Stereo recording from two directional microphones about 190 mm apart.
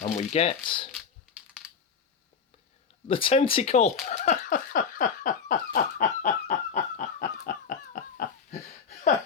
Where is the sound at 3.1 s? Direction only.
25° left (ahead or behind).